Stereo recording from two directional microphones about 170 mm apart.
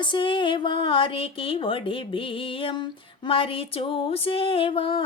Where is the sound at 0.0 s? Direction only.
30° left (ahead or behind).